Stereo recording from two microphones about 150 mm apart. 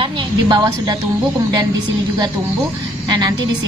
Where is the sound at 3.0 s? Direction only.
25° right (ahead or behind).